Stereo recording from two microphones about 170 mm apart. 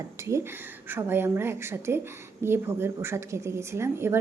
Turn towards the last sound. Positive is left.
turn(degrees=-15)  # may be behind; listen again after turning